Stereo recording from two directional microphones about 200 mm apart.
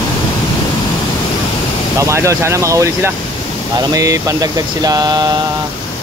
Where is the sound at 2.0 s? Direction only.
15° right (ahead or behind).